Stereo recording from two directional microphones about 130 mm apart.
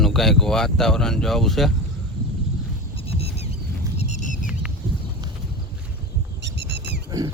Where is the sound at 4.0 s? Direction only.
65° left (ahead or behind).